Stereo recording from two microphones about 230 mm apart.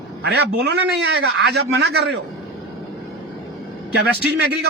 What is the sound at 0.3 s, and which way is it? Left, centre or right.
A man's voice, right.